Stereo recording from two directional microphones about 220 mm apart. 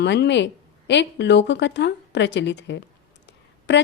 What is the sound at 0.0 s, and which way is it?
Speech, 50° left (ahead or behind).